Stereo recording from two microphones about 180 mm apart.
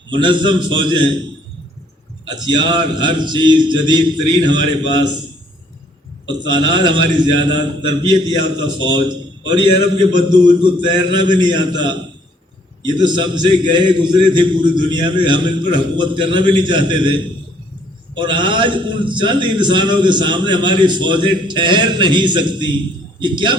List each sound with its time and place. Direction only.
0.1 s a man's voice: 25° right (ahead or behind)
2.2 s a man's voice: 25° right (ahead or behind)
6.2 s a man's voice: 25° right (ahead or behind)
10.1 s a man's voice: 25° right (ahead or behind)
18.2 s a man's voice: 25° right (ahead or behind)